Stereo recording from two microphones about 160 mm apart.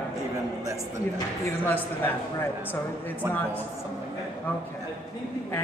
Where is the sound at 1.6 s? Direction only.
10° left (ahead or behind).